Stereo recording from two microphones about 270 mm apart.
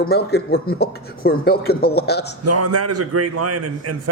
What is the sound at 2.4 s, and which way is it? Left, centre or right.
A man's voice, right.